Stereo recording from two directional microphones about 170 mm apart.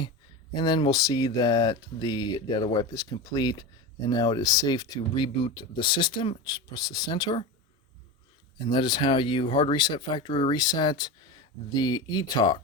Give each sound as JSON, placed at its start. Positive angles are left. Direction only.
{"t": 0.5, "sound": "speech", "side_deg": 25}
{"t": 8.5, "sound": "speech", "side_deg": 25}